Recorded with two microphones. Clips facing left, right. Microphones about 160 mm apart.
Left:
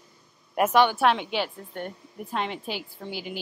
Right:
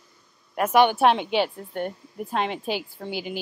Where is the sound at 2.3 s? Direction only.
25° right (ahead or behind).